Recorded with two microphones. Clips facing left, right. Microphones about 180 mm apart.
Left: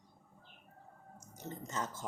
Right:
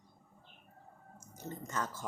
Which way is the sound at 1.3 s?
20° left (ahead or behind).